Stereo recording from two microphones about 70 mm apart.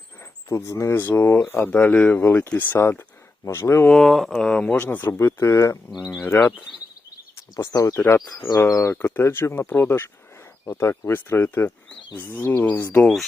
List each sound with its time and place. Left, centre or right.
0.2 s speech: left
1.5 s speech: left
2.2 s speech: left
3.8 s speech: centre
4.8 s speech: left
5.1 s speech: left
6.7 s a sound: centre
7.6 s speech: left
7.9 s speech: left
8.4 s speech: left
9.1 s speech: left